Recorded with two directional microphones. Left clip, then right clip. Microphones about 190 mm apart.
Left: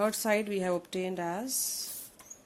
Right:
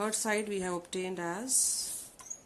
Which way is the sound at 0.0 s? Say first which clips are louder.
Left 4 dB; 20° left (ahead or behind).